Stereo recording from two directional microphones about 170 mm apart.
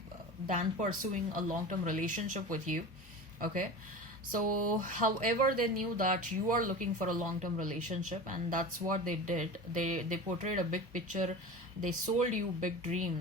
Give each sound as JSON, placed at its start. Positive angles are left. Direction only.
{"t": 0.4, "sound": "speech", "side_deg": -50}